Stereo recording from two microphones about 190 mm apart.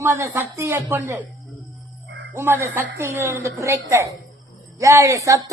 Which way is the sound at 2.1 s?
60° right (ahead or behind).